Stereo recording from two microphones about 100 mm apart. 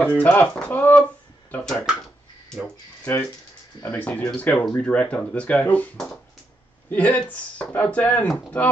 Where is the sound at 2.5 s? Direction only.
5° left (ahead or behind).